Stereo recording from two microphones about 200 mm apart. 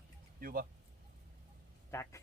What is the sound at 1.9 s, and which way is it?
Speech, 15° left (ahead or behind).